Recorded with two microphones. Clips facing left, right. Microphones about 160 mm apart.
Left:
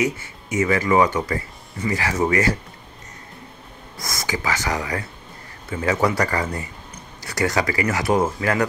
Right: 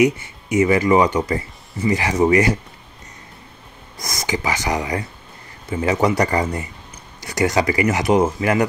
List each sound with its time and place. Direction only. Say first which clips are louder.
0.0 s speech: right 7 dB; 15° right (ahead or behind)
4.0 s speech: right 3 dB; 20° right (ahead or behind)